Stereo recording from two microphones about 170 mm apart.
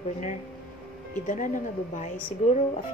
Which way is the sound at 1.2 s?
50° left (ahead or behind).